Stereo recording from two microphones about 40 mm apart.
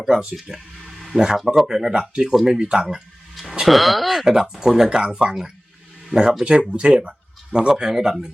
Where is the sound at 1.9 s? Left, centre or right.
Right.